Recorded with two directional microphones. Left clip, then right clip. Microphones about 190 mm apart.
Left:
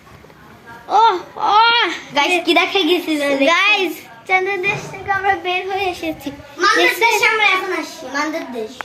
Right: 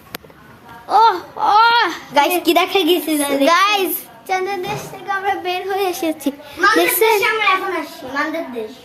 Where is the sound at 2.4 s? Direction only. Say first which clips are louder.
Even; 55° right (ahead or behind).